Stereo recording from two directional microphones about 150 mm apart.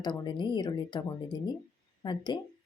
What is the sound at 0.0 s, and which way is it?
Speech, 30° left (ahead or behind).